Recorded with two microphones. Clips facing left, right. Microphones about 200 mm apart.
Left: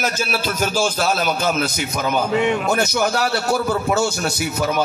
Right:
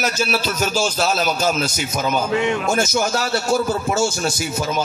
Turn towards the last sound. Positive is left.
turn(degrees=60)  # may be behind; listen again after turning